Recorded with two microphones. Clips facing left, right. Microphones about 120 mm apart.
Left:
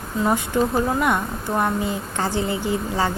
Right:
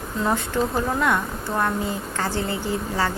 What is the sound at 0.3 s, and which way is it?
Speech, 15° left (ahead or behind).